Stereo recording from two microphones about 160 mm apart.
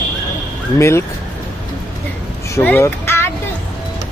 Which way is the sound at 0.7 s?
15° left (ahead or behind).